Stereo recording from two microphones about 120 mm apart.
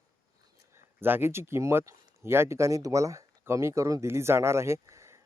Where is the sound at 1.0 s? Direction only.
20° right (ahead or behind).